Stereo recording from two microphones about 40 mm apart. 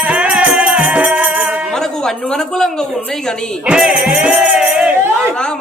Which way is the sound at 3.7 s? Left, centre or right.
Centre.